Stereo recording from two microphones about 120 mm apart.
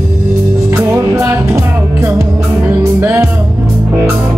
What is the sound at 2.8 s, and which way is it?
Music, 20° right (ahead or behind).